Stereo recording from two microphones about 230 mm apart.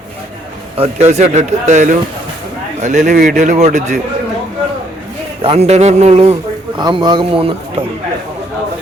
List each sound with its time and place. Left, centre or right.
0.8 s speech: right
5.4 s speech: right